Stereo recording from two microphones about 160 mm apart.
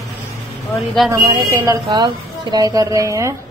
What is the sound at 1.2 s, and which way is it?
A woman's voice, 20° right (ahead or behind).